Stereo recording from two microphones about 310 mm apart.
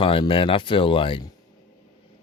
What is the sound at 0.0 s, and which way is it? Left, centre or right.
Speech, centre.